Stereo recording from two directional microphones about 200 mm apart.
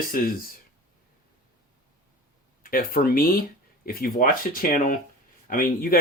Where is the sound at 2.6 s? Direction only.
45° left (ahead or behind).